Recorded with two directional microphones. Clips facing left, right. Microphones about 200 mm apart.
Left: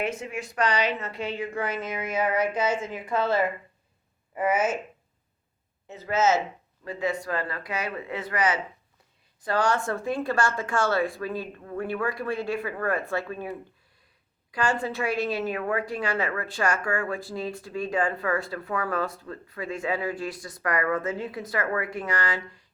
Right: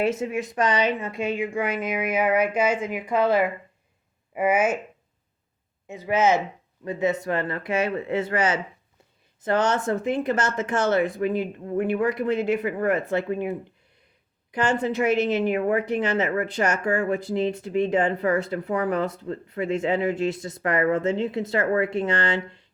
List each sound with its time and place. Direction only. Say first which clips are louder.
0.0 s a woman's voice: right 6 dB; 25° right (ahead or behind)
5.9 s a woman's voice: right 2 dB; 15° right (ahead or behind)